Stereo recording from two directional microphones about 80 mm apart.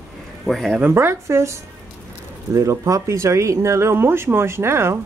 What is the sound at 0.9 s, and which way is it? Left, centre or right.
Speech, right.